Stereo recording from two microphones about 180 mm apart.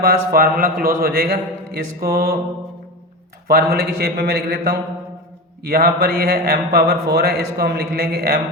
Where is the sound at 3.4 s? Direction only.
60° right (ahead or behind).